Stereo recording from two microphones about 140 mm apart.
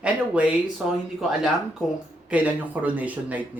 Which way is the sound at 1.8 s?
5° right (ahead or behind).